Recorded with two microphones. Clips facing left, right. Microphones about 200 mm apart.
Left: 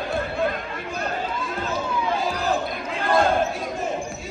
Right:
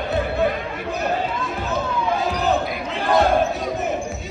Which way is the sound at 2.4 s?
Centre (ahead or behind).